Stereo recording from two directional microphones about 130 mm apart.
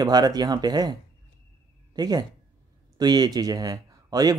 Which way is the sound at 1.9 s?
30° right (ahead or behind).